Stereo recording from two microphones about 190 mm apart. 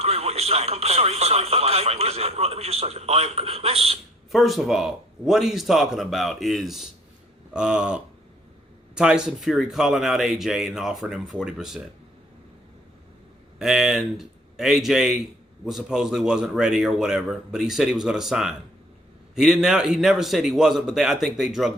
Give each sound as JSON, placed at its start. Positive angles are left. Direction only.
{"t": 0.0, "sound": "speech", "side_deg": -35}
{"t": 4.3, "sound": "a man's voice", "side_deg": 0}
{"t": 13.6, "sound": "a man's voice", "side_deg": -5}